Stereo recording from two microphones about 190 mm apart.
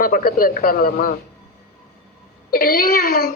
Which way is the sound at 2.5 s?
50° left (ahead or behind).